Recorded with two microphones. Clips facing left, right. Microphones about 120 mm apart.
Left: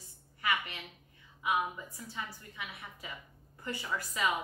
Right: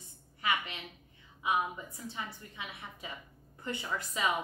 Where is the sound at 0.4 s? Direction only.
25° right (ahead or behind).